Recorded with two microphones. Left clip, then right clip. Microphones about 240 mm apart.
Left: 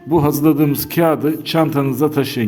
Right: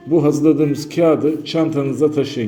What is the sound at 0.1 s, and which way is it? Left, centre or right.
A man's voice, left.